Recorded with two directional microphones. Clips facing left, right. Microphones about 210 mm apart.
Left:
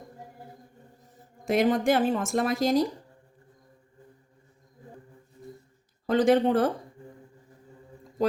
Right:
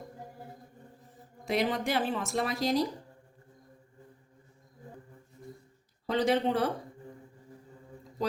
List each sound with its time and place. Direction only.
1.5 s speech: 45° left (ahead or behind)
6.1 s speech: 50° left (ahead or behind)